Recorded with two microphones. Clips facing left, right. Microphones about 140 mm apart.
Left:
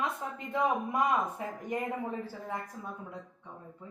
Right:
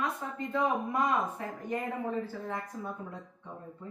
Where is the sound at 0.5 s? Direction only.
15° left (ahead or behind).